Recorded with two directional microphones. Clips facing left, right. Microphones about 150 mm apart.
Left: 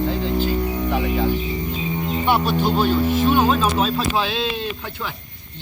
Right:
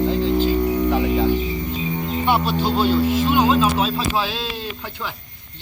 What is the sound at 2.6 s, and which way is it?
Music, 50° left (ahead or behind).